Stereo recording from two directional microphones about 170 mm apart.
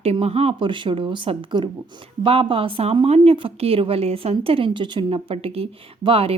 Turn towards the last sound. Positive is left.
turn(degrees=-35)  # may be behind; listen again after turning